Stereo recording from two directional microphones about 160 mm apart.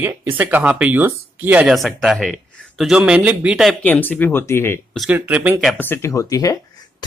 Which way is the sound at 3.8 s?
10° left (ahead or behind).